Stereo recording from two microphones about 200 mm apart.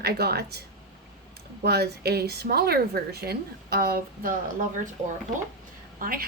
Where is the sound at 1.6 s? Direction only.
55° right (ahead or behind).